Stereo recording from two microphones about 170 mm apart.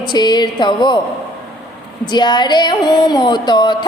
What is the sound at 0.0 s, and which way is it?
Speech, 25° left (ahead or behind).